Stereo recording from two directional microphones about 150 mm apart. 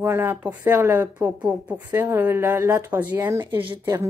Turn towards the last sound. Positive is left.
turn(degrees=-20)  # may be behind; listen again after turning